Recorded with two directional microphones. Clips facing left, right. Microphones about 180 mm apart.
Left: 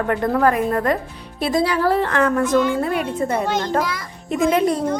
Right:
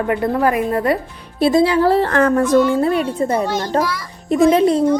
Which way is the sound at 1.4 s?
25° right (ahead or behind).